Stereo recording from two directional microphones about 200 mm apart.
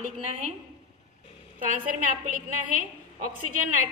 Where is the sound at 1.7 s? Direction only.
40° right (ahead or behind).